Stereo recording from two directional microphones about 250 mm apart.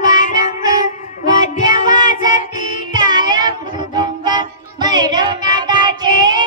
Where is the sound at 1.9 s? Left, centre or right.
Centre.